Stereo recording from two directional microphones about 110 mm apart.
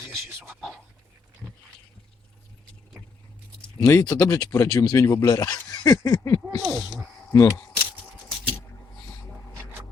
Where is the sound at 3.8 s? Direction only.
25° left (ahead or behind).